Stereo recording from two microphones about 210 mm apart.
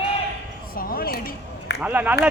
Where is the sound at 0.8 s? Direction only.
45° left (ahead or behind).